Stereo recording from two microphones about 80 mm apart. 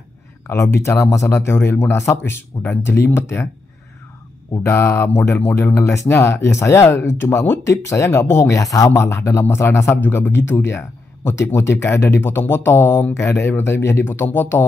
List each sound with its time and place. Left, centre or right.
0.5 s a man's voice: left
4.6 s a man's voice: left
9.0 s a man's voice: left